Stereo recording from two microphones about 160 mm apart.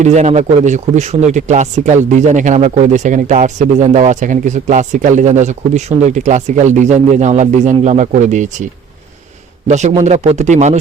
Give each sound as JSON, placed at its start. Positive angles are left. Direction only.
{"t": 0.0, "sound": "speech", "side_deg": -45}
{"t": 9.6, "sound": "speech", "side_deg": -45}